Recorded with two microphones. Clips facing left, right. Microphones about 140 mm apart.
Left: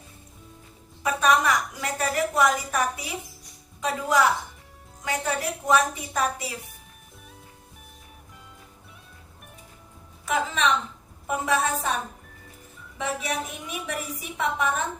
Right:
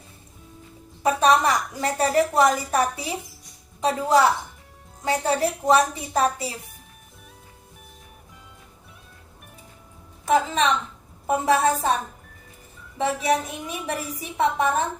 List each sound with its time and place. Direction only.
1.0 s a woman's voice: 30° right (ahead or behind)
10.2 s a woman's voice: 35° right (ahead or behind)
13.0 s a woman's voice: 35° right (ahead or behind)